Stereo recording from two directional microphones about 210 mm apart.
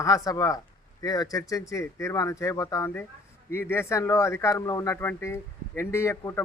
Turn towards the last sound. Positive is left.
turn(degrees=15)  # may be behind; listen again after turning